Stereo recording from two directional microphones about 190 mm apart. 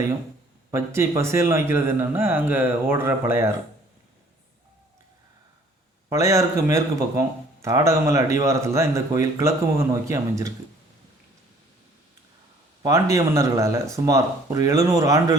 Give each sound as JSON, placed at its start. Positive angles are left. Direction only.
{"t": 0.9, "sound": "speech", "side_deg": -15}
{"t": 6.1, "sound": "speech", "side_deg": -15}
{"t": 12.8, "sound": "speech", "side_deg": -15}